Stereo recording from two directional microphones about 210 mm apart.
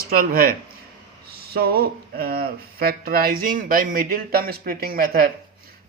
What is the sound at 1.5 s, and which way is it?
Speech, 45° right (ahead or behind).